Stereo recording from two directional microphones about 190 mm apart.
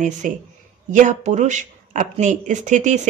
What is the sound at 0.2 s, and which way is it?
Speech, 40° right (ahead or behind).